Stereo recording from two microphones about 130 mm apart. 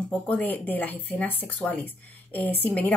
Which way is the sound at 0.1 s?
15° left (ahead or behind).